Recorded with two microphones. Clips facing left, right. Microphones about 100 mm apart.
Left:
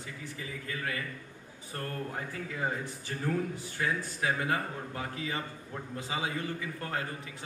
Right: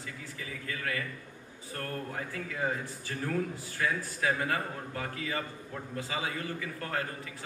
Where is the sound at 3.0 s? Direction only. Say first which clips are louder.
Even; 25° left (ahead or behind).